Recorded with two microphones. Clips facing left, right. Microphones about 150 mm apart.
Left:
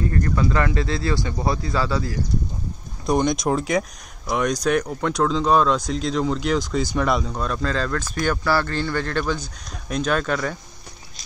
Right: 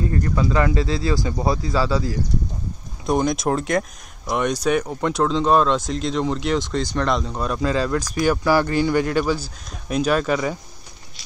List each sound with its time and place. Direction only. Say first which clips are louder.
0.0 s speech: even; 15° right (ahead or behind)